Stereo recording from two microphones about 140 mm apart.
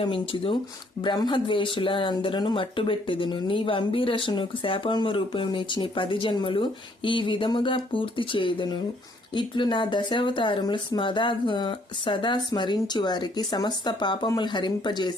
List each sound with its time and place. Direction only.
0.0 s speech: 40° left (ahead or behind)